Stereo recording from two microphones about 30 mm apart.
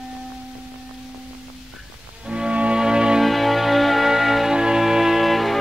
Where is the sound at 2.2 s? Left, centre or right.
Right.